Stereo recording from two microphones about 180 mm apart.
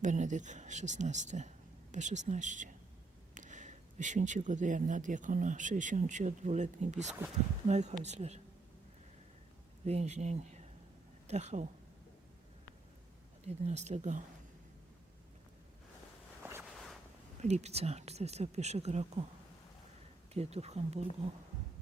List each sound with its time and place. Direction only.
0.0 s speech: 45° right (ahead or behind)
9.8 s speech: 35° right (ahead or behind)
13.4 s speech: 40° right (ahead or behind)
16.4 s walk: 15° right (ahead or behind)
16.7 s a sound: centre (ahead or behind)
17.4 s speech: 40° right (ahead or behind)
20.3 s speech: 35° right (ahead or behind)